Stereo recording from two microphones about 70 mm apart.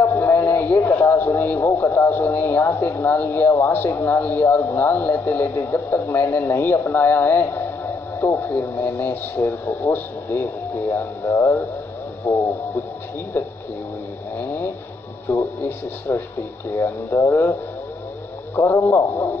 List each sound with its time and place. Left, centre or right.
0.1 s radio: left
1.8 s a man's voice: left
14.4 s vehicle: left
15.2 s a man's voice: left
18.6 s a man's voice: left